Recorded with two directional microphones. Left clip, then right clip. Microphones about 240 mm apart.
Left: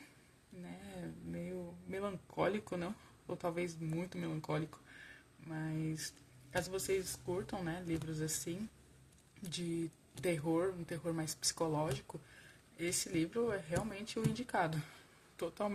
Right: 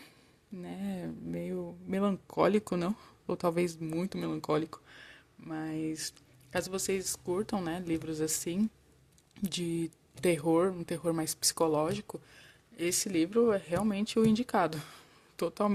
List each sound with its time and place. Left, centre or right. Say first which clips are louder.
0.6 s speech: right 9 dB; right
9.3 s a sound: right 9 dB; right
10.2 s speech: right 8 dB; right